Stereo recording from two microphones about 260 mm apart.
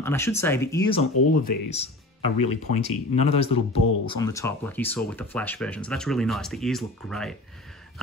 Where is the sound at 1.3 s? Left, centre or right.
Left.